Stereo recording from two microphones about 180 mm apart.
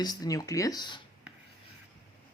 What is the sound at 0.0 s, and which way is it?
Speech, 20° left (ahead or behind).